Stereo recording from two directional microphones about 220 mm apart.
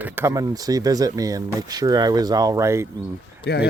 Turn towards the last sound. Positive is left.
turn(degrees=50)  # may be behind; listen again after turning